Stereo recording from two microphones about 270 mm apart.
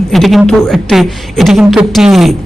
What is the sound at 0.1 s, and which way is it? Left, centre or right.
Speech, centre.